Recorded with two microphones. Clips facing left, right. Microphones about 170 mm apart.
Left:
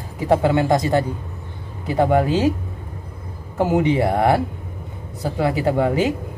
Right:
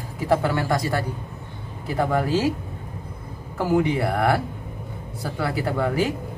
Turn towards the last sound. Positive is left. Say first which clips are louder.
# left 5 dB
turn(degrees=20)  # may be behind; listen again after turning